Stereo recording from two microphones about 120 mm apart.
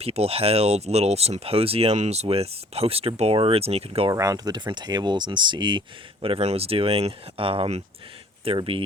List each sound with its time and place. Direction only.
0.0 s speech: 60° right (ahead or behind)
4.1 s speech: 30° right (ahead or behind)
6.2 s speech: 55° right (ahead or behind)